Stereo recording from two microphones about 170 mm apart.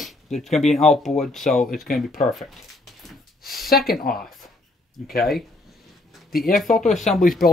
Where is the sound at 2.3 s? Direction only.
Centre (ahead or behind).